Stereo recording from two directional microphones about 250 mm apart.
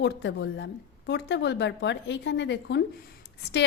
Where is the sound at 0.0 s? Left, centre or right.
Left.